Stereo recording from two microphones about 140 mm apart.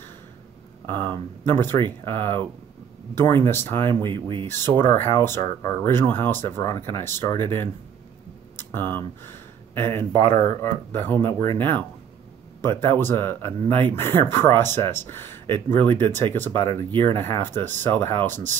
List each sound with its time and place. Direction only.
0.8 s speech: 15° left (ahead or behind)
3.4 s speech: 15° left (ahead or behind)
4.1 s speech: 35° right (ahead or behind)
4.5 s speech: 15° left (ahead or behind)
8.5 s speech: 15° left (ahead or behind)